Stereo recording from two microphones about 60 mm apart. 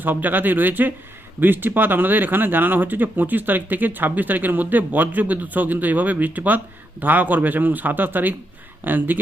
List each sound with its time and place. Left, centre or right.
0.0 s speech: right